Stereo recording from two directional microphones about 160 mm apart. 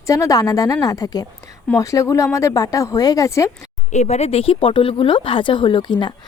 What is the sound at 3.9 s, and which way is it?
Speech, 45° left (ahead or behind).